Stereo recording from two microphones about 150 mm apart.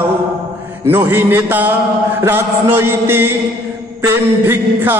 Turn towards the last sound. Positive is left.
turn(degrees=-15)  # may be behind; listen again after turning